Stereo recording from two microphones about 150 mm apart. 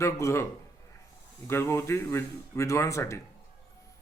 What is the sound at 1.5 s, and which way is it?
Speech, 15° left (ahead or behind).